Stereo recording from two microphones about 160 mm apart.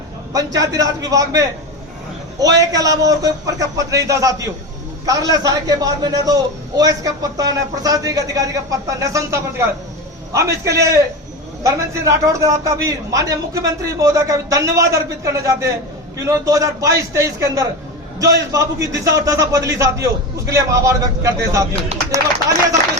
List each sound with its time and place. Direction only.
0.3 s a man's voice: 20° right (ahead or behind)
21.9 s speech: 40° right (ahead or behind)